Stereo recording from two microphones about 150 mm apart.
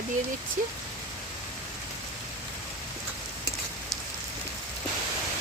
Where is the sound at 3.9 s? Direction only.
Centre (ahead or behind).